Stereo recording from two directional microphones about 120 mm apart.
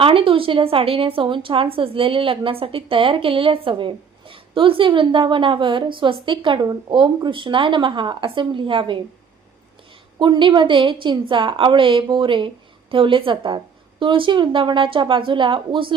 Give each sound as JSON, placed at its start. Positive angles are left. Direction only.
{"t": 0.0, "sound": "a woman's voice", "side_deg": -50}
{"t": 10.2, "sound": "a woman's voice", "side_deg": -40}